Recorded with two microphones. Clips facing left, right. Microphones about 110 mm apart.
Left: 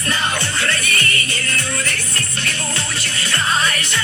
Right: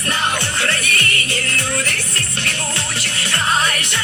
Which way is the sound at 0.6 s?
75° right (ahead or behind).